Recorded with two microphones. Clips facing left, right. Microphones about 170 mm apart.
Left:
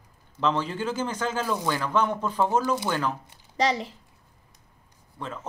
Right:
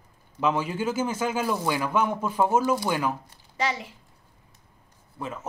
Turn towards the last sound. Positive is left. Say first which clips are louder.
# right 1 dB
turn(degrees=-10)  # may be behind; listen again after turning